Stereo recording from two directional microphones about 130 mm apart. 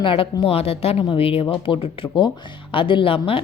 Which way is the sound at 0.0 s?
45° left (ahead or behind).